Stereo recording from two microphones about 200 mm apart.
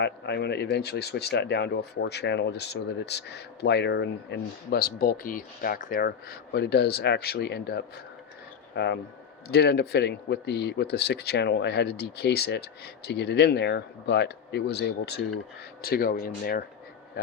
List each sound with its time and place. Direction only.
0.0 s speech: 55° left (ahead or behind)